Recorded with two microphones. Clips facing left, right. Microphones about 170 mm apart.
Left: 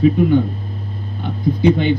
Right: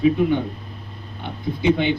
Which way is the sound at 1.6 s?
45° left (ahead or behind).